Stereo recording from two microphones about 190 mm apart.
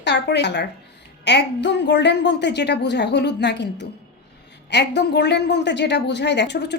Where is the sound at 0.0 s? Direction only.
65° left (ahead or behind).